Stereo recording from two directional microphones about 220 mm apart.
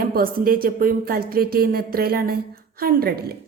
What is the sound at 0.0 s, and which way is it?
A woman's voice, 40° right (ahead or behind).